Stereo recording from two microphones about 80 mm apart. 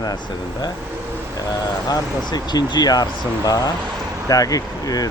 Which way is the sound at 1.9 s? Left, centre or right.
Left.